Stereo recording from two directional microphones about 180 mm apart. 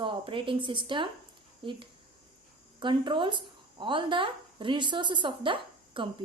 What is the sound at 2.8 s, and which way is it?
A woman's voice, 25° right (ahead or behind).